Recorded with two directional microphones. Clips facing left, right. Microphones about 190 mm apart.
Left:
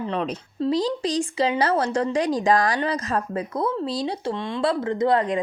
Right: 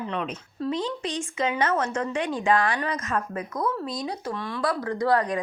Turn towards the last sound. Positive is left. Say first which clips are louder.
# left 3 dB
turn(degrees=25)  # may be behind; listen again after turning